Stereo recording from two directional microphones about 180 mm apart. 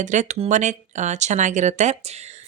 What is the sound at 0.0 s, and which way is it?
Speech, 40° right (ahead or behind).